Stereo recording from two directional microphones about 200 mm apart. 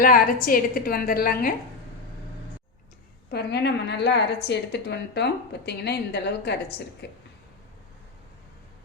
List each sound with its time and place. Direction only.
0.0 s a woman's voice: 45° left (ahead or behind)
3.2 s a woman's voice: 55° left (ahead or behind)